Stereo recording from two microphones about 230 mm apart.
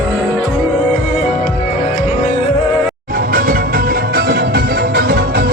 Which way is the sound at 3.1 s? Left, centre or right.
Right.